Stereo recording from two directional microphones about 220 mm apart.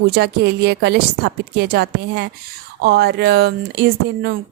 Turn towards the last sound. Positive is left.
turn(degrees=-50)  # may be behind; listen again after turning